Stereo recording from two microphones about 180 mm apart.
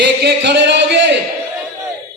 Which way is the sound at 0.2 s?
70° right (ahead or behind).